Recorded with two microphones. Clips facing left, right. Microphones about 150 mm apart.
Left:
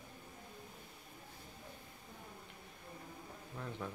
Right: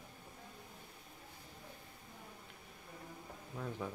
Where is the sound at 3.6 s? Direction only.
10° right (ahead or behind).